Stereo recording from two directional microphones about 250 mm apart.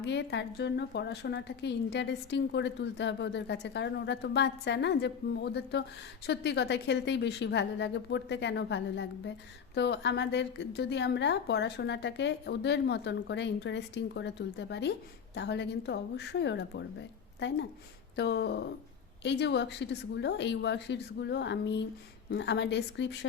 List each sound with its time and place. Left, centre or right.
0.0 s a woman's voice: left